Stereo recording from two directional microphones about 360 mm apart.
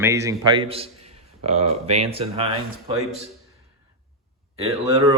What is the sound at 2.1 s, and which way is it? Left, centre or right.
Speech, centre.